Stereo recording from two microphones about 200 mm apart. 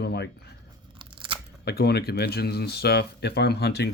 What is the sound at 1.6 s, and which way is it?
Speech, 55° left (ahead or behind).